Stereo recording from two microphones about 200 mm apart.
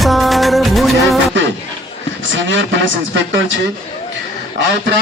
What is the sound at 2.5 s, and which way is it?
Speech, 65° right (ahead or behind).